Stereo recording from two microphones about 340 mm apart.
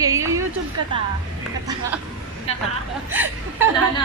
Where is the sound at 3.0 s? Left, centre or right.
Centre.